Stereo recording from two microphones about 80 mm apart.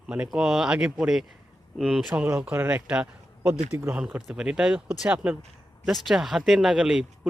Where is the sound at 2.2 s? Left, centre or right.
Centre.